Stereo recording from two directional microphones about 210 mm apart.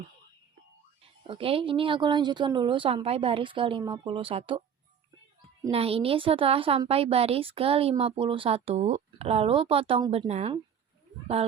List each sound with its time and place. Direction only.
1.0 s a woman's voice: 25° right (ahead or behind)
5.7 s a woman's voice: 25° right (ahead or behind)